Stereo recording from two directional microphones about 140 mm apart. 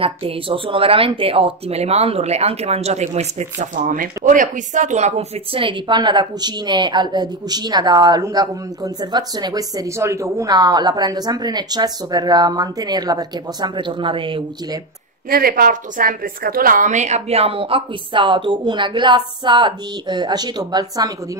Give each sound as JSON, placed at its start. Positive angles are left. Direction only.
{"t": 0.0, "sound": "speech", "side_deg": -40}
{"t": 15.2, "sound": "speech", "side_deg": -90}